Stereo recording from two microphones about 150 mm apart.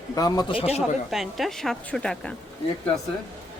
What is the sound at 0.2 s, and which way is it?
Speech, 25° left (ahead or behind).